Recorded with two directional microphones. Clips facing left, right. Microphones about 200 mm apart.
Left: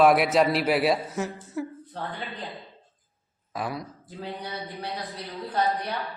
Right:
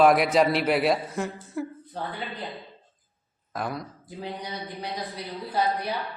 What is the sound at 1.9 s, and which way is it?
Speech, 10° right (ahead or behind).